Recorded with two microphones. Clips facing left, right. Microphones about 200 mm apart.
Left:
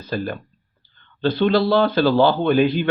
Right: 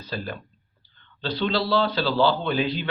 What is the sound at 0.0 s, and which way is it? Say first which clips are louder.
Speech: left 7 dB; 50° left (ahead or behind).